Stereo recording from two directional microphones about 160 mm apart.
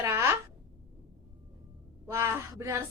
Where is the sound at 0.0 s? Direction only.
15° right (ahead or behind).